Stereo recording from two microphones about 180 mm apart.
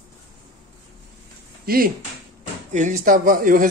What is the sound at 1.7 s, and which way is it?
Speech, 55° right (ahead or behind).